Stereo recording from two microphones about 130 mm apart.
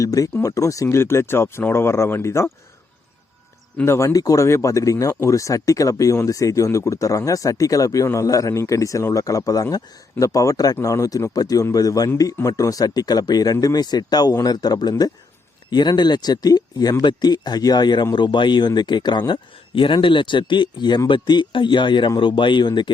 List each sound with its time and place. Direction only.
0.0 s speech: 25° left (ahead or behind)
3.8 s speech: 20° left (ahead or behind)